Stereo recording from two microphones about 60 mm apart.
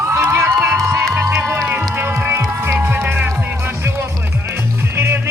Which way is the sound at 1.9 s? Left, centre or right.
Right.